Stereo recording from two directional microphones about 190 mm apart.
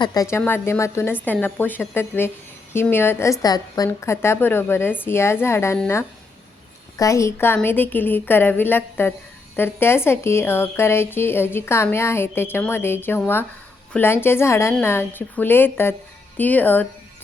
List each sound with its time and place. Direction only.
0.0 s a woman's voice: 20° left (ahead or behind)